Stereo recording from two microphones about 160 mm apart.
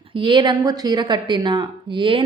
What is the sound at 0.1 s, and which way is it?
Speech, 30° right (ahead or behind).